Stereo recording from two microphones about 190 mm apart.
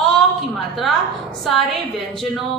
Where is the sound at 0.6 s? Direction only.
Centre (ahead or behind).